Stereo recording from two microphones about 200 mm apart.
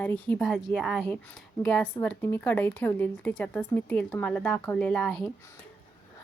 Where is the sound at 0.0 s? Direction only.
10° left (ahead or behind).